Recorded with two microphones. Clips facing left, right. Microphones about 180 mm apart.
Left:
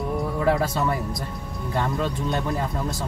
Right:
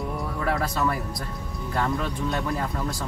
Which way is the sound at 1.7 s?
20° left (ahead or behind).